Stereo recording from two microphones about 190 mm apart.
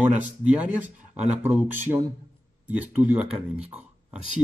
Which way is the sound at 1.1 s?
35° right (ahead or behind).